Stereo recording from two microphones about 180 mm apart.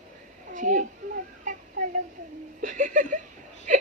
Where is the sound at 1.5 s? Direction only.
45° right (ahead or behind).